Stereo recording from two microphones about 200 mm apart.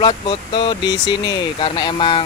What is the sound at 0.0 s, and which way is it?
Speech, 25° left (ahead or behind).